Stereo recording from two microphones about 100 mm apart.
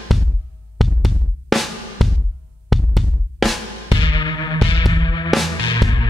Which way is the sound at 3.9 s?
55° left (ahead or behind).